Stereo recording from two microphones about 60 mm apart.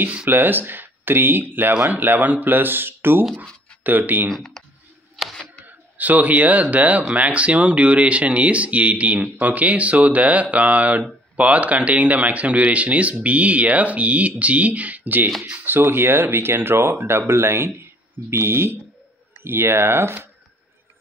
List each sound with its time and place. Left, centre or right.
0.3 s speech: right
4.3 s speech: centre
5.1 s a sound: centre
5.7 s speech: right